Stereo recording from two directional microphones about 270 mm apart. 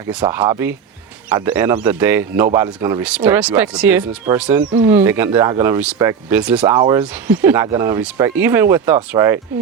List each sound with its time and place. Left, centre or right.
0.1 s speech: centre
4.6 s speech: right
4.9 s speech: centre